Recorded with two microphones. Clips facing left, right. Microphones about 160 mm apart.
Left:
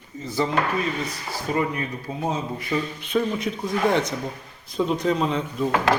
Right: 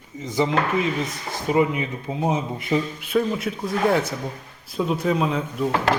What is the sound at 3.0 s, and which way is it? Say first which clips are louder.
Speech: right 1 dB; 5° right (ahead or behind).